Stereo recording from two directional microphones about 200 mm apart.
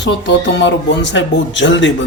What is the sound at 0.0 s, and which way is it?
Speech, 60° left (ahead or behind).